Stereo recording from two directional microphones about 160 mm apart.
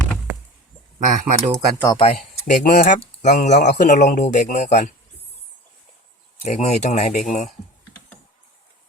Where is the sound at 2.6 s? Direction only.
55° left (ahead or behind).